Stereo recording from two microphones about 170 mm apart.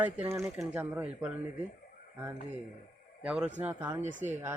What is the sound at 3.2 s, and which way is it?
Speech, 5° right (ahead or behind).